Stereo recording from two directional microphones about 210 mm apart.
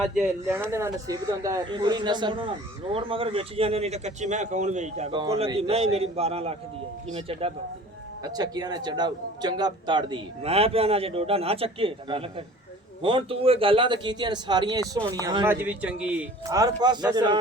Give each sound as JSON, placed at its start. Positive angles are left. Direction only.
{"t": 0.0, "sound": "speech", "side_deg": 0}
{"t": 0.7, "sound": "a man's voice", "side_deg": -15}
{"t": 15.4, "sound": "a man's voice", "side_deg": -5}
{"t": 16.6, "sound": "a man's voice", "side_deg": -20}